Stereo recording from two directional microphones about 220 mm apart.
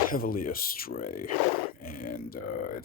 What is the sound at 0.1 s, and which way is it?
Speech, 40° left (ahead or behind).